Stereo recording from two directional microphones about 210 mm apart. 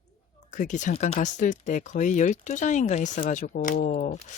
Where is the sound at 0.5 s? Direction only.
35° left (ahead or behind).